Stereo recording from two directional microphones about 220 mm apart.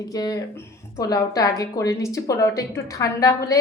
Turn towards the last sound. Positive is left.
turn(degrees=15)  # may be behind; listen again after turning